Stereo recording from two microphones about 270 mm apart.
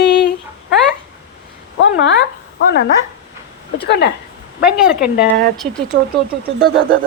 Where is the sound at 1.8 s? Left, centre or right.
Left.